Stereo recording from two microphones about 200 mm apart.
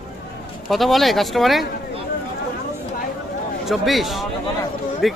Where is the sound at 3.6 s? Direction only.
Centre (ahead or behind).